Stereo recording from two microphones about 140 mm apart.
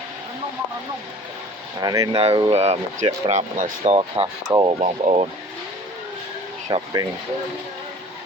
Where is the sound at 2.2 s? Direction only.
45° right (ahead or behind).